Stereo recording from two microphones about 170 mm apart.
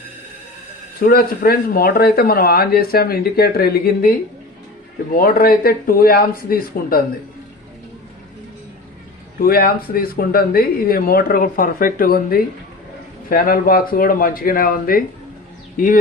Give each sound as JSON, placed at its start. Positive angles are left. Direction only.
{"t": 0.9, "sound": "speech", "side_deg": 60}
{"t": 5.1, "sound": "speech", "side_deg": 60}
{"t": 9.4, "sound": "speech", "side_deg": 60}